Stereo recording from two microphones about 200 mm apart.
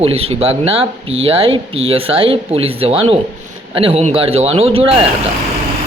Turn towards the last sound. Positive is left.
turn(degrees=-25)  # may be behind; listen again after turning